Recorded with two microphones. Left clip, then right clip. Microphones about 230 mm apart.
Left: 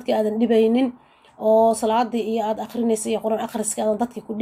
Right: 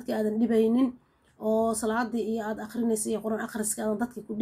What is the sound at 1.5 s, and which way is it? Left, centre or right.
Speech, left.